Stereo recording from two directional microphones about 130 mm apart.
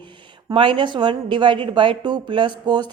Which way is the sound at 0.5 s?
40° right (ahead or behind).